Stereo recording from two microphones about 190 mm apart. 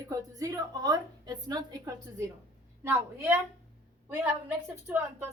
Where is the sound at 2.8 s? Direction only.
10° right (ahead or behind).